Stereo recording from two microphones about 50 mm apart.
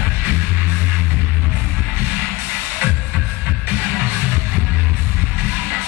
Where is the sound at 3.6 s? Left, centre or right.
Right.